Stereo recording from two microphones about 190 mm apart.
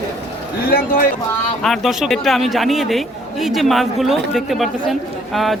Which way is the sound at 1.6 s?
Centre (ahead or behind).